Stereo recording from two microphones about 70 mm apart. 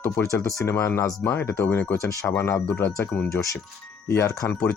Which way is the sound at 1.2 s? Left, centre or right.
Left.